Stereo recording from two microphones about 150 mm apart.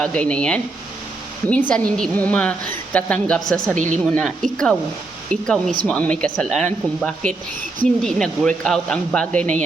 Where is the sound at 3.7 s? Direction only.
55° right (ahead or behind).